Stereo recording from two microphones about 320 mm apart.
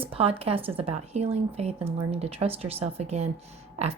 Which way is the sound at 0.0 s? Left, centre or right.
Centre.